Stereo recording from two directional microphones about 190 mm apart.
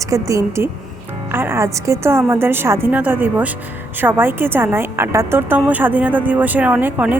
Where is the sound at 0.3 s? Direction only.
15° right (ahead or behind).